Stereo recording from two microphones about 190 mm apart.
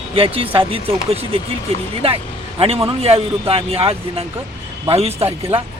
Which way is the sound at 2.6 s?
30° right (ahead or behind).